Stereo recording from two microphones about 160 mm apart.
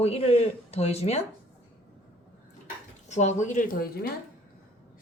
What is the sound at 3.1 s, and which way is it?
Speech, 50° left (ahead or behind).